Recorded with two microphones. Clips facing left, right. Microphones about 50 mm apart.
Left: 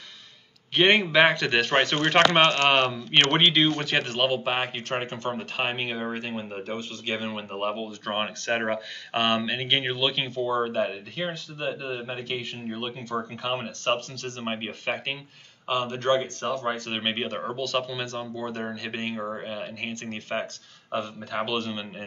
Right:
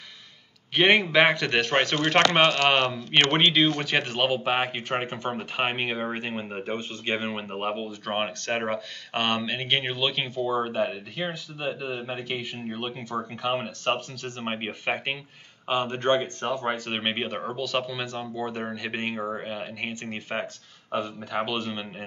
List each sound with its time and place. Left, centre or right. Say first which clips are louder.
0.7 s speech: even; centre; by 7.4 s right
7.5 s speech: left 2 dB; centre
8.0 s speech: even; centre
17.0 s speech: even; centre